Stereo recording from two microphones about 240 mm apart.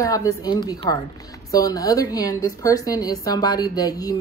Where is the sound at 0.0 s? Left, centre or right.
Centre.